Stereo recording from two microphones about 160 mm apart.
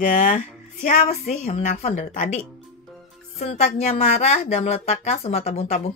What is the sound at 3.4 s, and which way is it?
Speech, 40° left (ahead or behind).